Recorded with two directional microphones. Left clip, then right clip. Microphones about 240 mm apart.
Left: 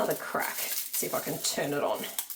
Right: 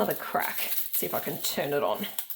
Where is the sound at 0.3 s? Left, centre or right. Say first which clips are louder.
Right 2 dB; right.